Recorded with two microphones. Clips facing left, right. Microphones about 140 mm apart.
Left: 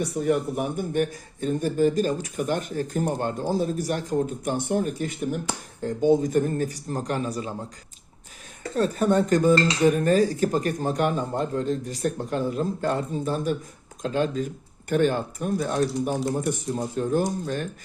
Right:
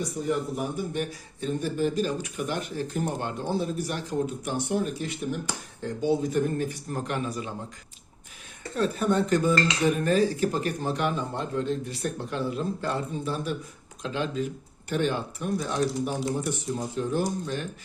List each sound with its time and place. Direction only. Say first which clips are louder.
0.0 s dishes: left 4 dB; 65° left (ahead or behind); by 7.5 s 35° left (ahead or behind)
8.7 s dishes: left 3 dB; 40° left (ahead or behind)